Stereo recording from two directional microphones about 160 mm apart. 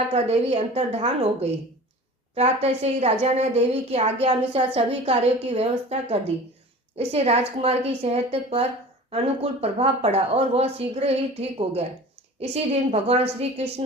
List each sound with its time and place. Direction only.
0.1 s a woman's voice: 40° right (ahead or behind)